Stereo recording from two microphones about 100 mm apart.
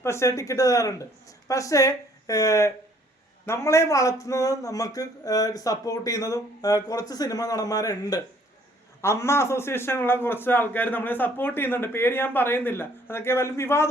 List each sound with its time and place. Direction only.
0.0 s speech: 30° left (ahead or behind)
9.0 s a man's voice: 30° left (ahead or behind)